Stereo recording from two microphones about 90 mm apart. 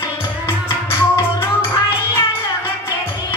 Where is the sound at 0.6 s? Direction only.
30° left (ahead or behind).